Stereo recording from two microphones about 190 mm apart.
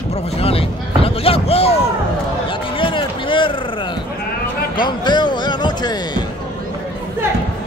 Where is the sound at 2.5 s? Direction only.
25° left (ahead or behind).